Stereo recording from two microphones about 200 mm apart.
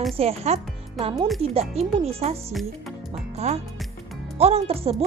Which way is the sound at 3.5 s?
35° right (ahead or behind).